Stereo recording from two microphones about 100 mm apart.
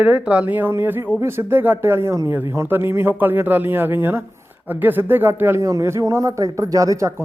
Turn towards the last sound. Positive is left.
turn(degrees=-30)  # may be behind; listen again after turning